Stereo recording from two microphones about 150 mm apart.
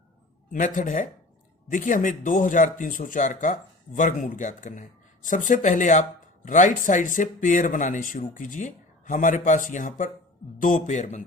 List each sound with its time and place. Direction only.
0.5 s speech: 60° left (ahead or behind)